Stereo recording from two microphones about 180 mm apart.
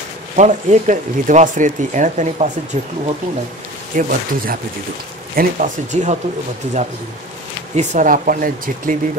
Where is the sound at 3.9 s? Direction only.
50° right (ahead or behind).